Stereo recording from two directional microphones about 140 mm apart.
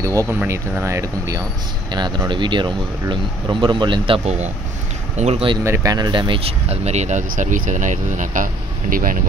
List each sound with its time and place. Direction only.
0.3 s speech: 15° right (ahead or behind); by 4.4 s 40° right (ahead or behind)
5.1 s speech: 55° right (ahead or behind)
5.6 s speech: 20° right (ahead or behind); by 8.5 s 65° right (ahead or behind)
8.9 s speech: 90° right